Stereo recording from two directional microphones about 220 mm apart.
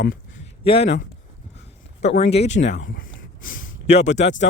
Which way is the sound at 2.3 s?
30° left (ahead or behind).